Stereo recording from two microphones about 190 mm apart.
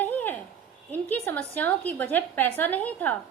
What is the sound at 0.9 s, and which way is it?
A woman's voice, 10° left (ahead or behind).